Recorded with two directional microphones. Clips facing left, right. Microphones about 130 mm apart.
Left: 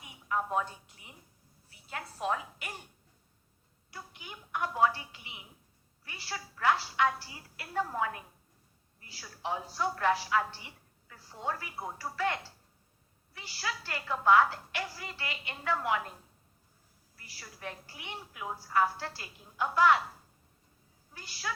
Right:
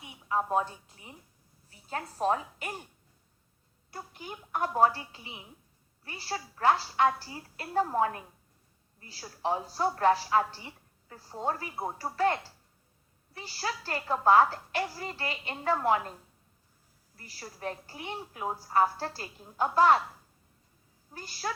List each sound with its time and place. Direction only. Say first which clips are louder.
0.0 s a woman's voice: right 3 dB; 30° right (ahead or behind)
3.9 s a woman's voice: right 5 dB; 40° right (ahead or behind)
17.2 s a woman's voice: right 6 dB; 40° right (ahead or behind)
21.1 s speech: right 4 dB; 40° right (ahead or behind)